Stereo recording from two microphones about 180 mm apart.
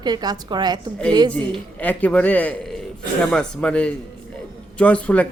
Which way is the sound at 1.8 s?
10° left (ahead or behind).